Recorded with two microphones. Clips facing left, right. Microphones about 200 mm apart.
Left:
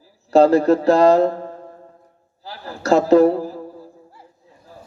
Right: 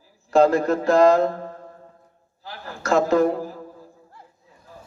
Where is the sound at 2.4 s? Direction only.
35° left (ahead or behind).